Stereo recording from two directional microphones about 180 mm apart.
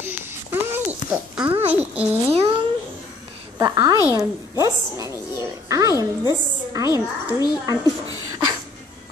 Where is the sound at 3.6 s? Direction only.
20° right (ahead or behind).